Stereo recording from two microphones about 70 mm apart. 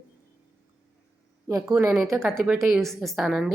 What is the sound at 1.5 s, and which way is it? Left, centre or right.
Speech, right.